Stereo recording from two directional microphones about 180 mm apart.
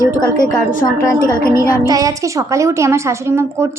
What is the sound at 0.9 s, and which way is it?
Speech, 15° left (ahead or behind).